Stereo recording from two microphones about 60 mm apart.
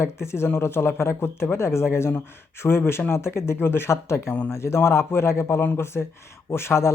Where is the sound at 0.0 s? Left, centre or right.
Left.